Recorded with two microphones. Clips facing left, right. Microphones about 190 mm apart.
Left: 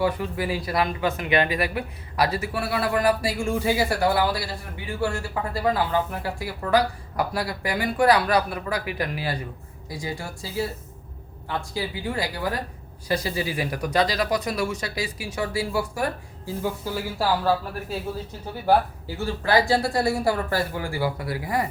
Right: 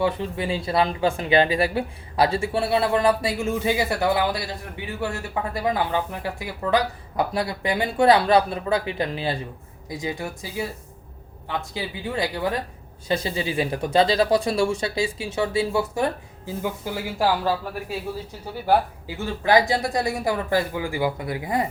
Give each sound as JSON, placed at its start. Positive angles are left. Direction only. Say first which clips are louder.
{"t": 0.0, "sound": "speech", "louder": "right 1 dB", "side_deg": -25}
{"t": 19.2, "sound": "speech", "louder": "right 2 dB", "side_deg": -20}